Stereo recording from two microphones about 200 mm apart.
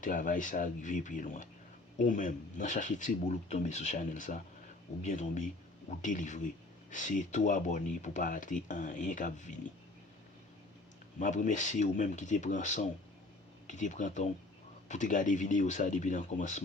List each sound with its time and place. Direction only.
0.0 s speech: 40° left (ahead or behind)
11.2 s speech: 40° left (ahead or behind)